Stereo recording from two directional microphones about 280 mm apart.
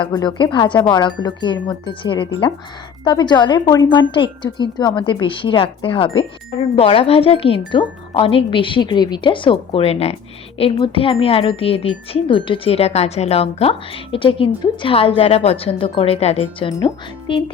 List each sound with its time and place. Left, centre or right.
0.0 s speech: centre